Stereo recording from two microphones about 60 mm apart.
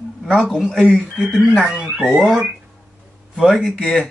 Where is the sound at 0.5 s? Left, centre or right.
Centre.